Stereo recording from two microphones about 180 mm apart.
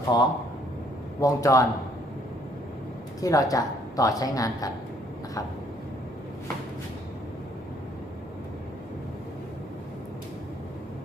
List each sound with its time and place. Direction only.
0.1 s a woman's voice: 25° left (ahead or behind)
3.2 s a woman's voice: 20° left (ahead or behind)